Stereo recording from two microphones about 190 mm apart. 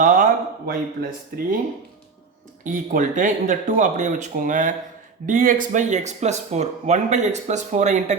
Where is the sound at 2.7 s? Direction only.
45° right (ahead or behind).